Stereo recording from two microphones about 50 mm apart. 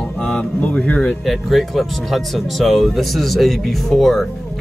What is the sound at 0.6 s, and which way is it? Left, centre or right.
Speech, left.